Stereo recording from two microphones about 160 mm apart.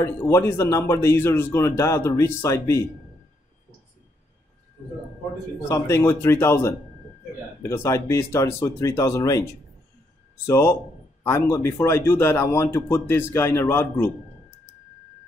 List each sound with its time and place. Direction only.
0.0 s speech: 15° left (ahead or behind)
5.7 s speech: 15° left (ahead or behind)